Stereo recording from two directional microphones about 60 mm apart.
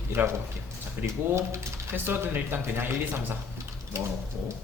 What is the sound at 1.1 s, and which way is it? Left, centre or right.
Speech, right.